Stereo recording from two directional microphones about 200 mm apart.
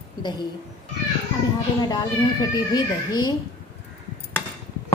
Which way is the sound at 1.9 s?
20° left (ahead or behind).